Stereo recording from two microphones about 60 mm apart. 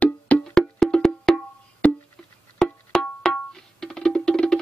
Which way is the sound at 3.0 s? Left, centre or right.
Centre.